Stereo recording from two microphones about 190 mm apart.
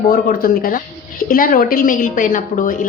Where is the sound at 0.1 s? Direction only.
50° left (ahead or behind).